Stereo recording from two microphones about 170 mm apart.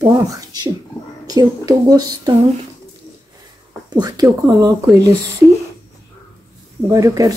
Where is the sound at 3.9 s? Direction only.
25° right (ahead or behind).